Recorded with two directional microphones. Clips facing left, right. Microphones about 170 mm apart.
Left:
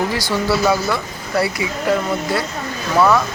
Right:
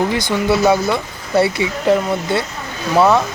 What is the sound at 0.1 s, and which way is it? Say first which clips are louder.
Speech: right 2 dB; 20° right (ahead or behind).